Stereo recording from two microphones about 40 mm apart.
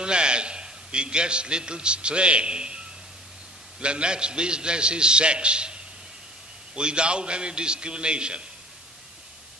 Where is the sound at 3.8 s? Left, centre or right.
Right.